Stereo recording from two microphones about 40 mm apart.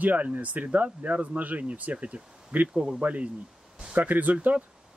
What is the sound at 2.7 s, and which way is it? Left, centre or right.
Speech, centre.